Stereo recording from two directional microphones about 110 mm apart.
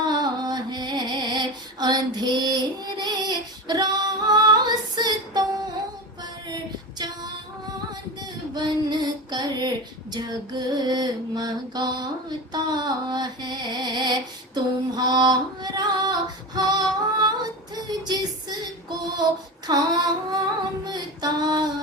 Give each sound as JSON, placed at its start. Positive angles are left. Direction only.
{"t": 0.0, "sound": "music", "side_deg": -40}
{"t": 3.0, "sound": "female singing", "side_deg": -40}
{"t": 8.5, "sound": "female singing", "side_deg": -40}